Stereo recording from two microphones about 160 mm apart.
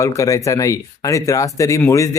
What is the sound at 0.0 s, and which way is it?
Speech, 20° left (ahead or behind).